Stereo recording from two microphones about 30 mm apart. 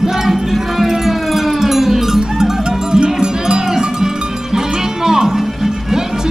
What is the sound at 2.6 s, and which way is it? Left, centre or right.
Music, right.